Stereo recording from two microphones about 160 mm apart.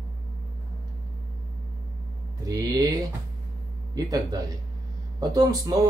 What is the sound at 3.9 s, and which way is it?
Speech, 25° right (ahead or behind).